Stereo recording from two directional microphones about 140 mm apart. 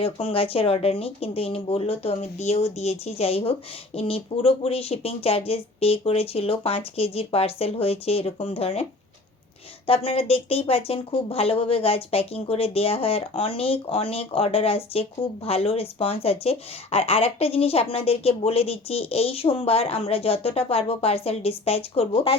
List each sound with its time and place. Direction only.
0.0 s speech: 40° left (ahead or behind)